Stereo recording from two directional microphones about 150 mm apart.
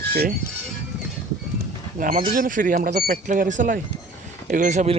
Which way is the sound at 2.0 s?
70° right (ahead or behind).